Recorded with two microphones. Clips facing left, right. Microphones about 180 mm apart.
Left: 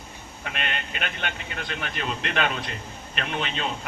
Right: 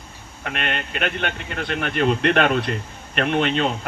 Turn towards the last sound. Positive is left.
turn(degrees=-55)  # may be behind; listen again after turning